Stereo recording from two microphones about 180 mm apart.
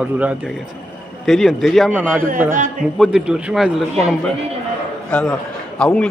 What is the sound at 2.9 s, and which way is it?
A man's voice, 5° right (ahead or behind).